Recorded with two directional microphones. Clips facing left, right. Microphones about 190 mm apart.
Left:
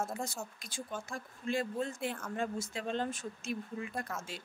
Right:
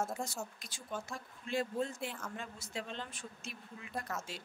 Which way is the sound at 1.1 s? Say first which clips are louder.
Left 4 dB; 50° left (ahead or behind).